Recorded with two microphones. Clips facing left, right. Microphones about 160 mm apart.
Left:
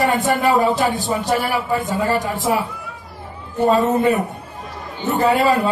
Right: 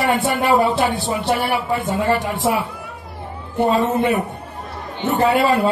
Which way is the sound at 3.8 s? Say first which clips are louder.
Left 2 dB; 40° left (ahead or behind).